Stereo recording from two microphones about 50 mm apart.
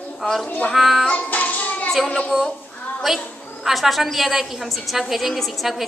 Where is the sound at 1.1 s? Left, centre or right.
Left.